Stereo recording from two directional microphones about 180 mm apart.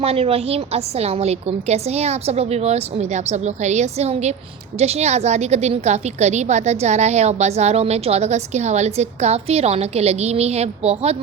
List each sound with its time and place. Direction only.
0.0 s a woman's voice: 35° right (ahead or behind)